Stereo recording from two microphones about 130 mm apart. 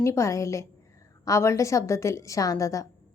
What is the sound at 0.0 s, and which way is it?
A woman's voice, 20° left (ahead or behind).